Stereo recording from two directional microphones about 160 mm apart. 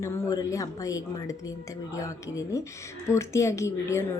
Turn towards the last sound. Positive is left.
turn(degrees=20)  # may be behind; listen again after turning